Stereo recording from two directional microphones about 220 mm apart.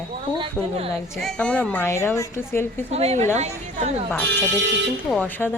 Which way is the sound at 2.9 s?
30° right (ahead or behind).